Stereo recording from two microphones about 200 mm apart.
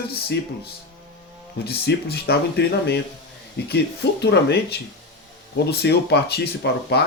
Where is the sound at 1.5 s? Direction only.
55° left (ahead or behind).